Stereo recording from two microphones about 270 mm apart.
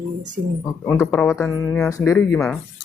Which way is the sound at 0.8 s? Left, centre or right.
Centre.